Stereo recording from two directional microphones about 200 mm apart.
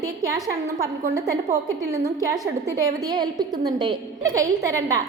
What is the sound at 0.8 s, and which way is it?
A woman's voice, 15° right (ahead or behind).